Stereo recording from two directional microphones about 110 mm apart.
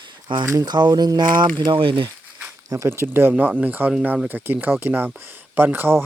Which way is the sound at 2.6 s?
25° right (ahead or behind).